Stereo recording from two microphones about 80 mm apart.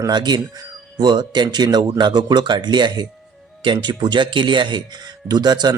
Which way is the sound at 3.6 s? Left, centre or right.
Right.